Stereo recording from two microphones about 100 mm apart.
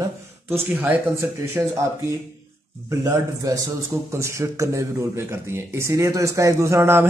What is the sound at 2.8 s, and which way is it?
A man's voice, 35° right (ahead or behind).